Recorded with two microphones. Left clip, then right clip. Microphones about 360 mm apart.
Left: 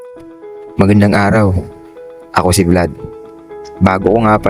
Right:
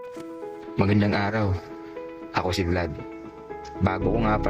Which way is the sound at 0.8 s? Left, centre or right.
Left.